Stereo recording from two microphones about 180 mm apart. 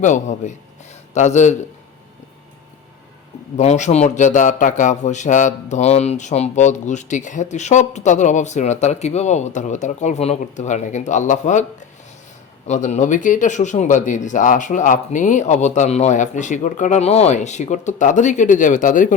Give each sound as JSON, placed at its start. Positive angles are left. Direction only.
{"t": 0.0, "sound": "speech", "side_deg": 40}
{"t": 3.6, "sound": "speech", "side_deg": 40}
{"t": 12.6, "sound": "speech", "side_deg": 40}